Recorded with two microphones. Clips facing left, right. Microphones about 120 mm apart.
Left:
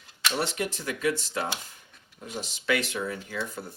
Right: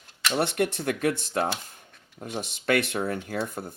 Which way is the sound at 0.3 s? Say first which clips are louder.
Right 6 dB; 60° right (ahead or behind).